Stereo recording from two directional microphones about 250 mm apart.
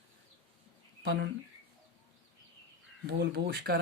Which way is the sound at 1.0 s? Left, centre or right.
Right.